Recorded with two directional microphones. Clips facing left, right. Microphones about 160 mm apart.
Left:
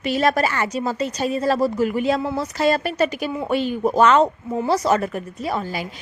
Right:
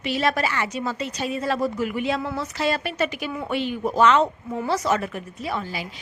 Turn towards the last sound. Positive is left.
turn(degrees=45)  # may be behind; listen again after turning